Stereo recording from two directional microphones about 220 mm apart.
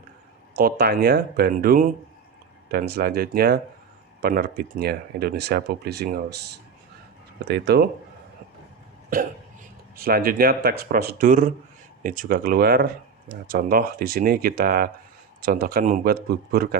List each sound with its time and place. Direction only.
0.5 s speech: 45° right (ahead or behind)
7.4 s speech: 50° right (ahead or behind)
10.0 s speech: 45° right (ahead or behind)